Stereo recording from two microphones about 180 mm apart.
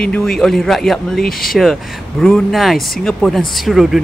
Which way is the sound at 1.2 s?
55° left (ahead or behind).